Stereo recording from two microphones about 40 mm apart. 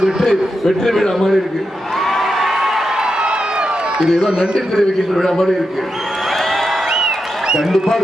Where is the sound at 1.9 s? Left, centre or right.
Centre.